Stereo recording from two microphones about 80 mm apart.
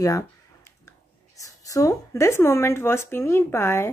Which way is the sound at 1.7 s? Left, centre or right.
Left.